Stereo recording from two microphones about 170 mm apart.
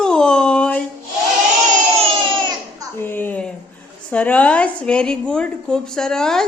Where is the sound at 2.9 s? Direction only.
10° left (ahead or behind).